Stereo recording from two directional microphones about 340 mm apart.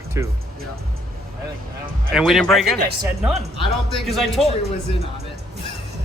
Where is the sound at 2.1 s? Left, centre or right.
Centre.